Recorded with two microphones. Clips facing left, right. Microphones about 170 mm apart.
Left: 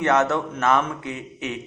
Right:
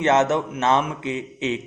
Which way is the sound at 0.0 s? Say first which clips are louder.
Right 2 dB; 20° right (ahead or behind).